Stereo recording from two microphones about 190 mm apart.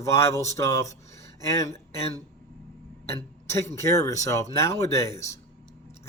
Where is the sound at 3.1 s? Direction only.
15° left (ahead or behind).